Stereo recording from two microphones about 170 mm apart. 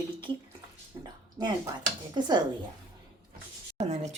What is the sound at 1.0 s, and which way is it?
Speech, 25° right (ahead or behind).